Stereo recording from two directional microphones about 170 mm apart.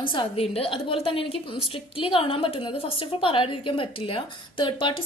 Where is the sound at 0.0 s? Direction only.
30° left (ahead or behind).